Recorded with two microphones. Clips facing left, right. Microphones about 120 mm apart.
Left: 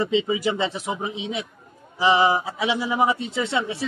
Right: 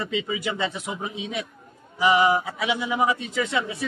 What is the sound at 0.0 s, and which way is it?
Speech, 25° left (ahead or behind).